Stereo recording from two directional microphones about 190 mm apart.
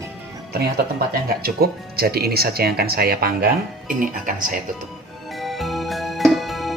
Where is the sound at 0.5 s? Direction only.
55° right (ahead or behind).